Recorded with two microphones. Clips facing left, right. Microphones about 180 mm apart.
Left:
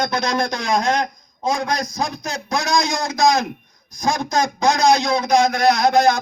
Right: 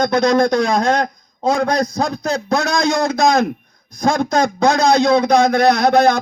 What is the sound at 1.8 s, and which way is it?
A man's voice, 60° right (ahead or behind).